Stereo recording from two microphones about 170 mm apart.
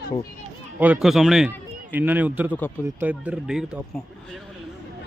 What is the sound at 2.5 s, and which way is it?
Speech, 10° left (ahead or behind).